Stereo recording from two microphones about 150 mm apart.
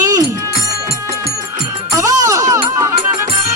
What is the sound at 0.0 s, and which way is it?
Music, 20° right (ahead or behind).